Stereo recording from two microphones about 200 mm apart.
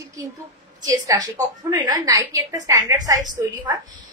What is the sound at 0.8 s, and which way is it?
A woman's voice, 20° right (ahead or behind).